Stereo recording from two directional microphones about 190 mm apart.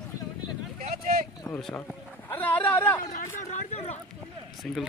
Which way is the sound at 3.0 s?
40° left (ahead or behind).